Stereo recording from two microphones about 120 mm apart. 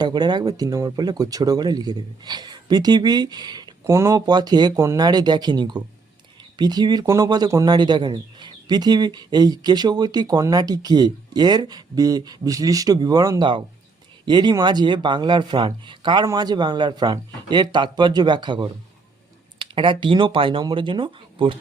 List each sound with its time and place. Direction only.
0.0 s speech: 35° right (ahead or behind)
3.8 s speech: 25° right (ahead or behind); by 21.6 s 45° right (ahead or behind)